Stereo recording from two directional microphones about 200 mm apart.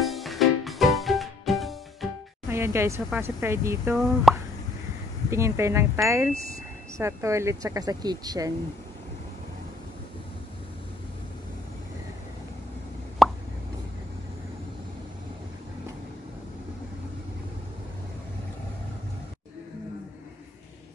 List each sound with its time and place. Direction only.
0.0 s music: centre (ahead or behind)
2.5 s speech: 10° right (ahead or behind)
4.0 s speech: centre (ahead or behind)
5.3 s speech: 15° right (ahead or behind)
13.2 s plop: centre (ahead or behind)